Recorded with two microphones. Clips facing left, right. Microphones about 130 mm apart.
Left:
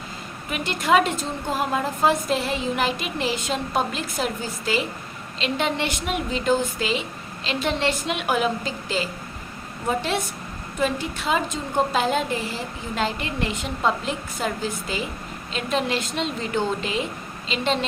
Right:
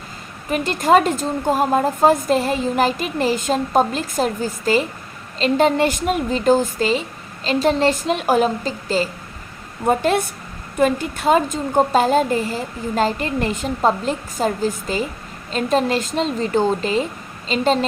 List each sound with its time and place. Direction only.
0.5 s a woman's voice: 40° right (ahead or behind)
9.8 s a woman's voice: 50° right (ahead or behind)